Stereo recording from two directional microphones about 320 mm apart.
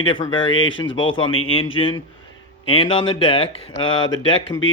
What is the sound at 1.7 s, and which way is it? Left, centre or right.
Speech, centre.